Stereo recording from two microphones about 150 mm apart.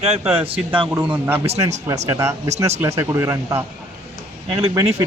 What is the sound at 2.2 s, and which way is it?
Speech, 20° right (ahead or behind).